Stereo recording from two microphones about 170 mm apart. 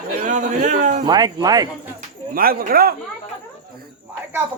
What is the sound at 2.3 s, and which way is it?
Speech, 60° right (ahead or behind).